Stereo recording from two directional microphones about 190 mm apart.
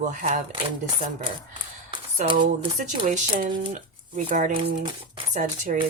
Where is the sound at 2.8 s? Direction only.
40° right (ahead or behind).